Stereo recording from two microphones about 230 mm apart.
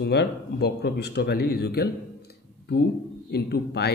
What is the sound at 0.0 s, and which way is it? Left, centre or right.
A man's voice, left.